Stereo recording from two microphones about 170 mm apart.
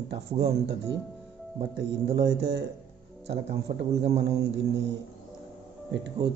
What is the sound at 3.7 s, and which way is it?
Speech, 55° right (ahead or behind).